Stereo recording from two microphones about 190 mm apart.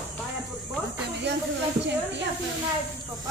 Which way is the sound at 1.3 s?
65° right (ahead or behind).